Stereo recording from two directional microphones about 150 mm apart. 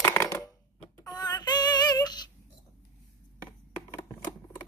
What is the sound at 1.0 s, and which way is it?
Synthetic singing, 25° left (ahead or behind).